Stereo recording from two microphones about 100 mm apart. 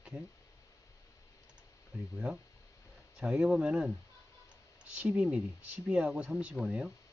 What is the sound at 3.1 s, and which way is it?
Speech, 10° right (ahead or behind).